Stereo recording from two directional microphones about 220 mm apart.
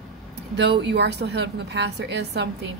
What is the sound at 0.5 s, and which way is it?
A woman's voice, 50° right (ahead or behind).